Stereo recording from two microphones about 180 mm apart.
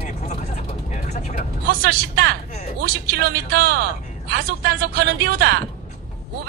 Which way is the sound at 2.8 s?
55° right (ahead or behind).